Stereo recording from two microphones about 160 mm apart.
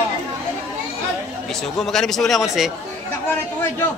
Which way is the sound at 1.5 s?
Centre (ahead or behind).